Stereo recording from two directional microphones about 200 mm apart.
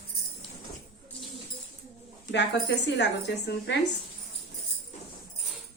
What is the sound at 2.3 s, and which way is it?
A woman's voice, 60° left (ahead or behind).